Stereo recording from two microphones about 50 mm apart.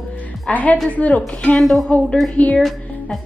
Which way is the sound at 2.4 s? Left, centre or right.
Left.